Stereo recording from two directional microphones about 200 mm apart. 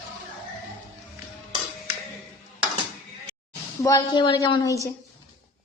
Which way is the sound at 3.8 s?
20° left (ahead or behind).